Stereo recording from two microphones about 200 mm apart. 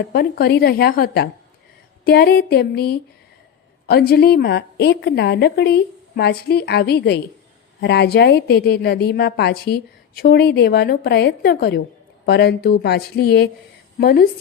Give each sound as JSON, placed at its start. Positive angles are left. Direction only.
{"t": 0.0, "sound": "a woman's voice", "side_deg": 50}